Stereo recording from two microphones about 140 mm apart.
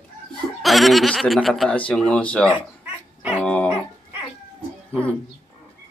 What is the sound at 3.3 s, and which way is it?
Dog, 10° left (ahead or behind).